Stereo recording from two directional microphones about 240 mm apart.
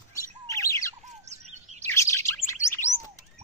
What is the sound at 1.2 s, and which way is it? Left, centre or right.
Chirp, right.